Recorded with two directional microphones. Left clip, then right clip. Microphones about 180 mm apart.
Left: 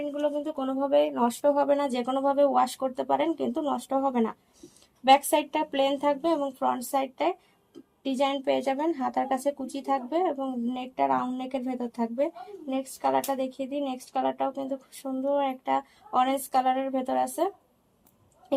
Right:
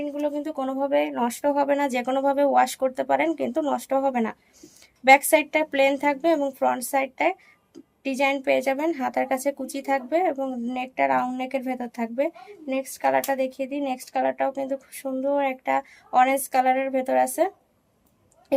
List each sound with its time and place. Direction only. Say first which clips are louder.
0.0 s a woman's voice: right 1 dB; 50° right (ahead or behind)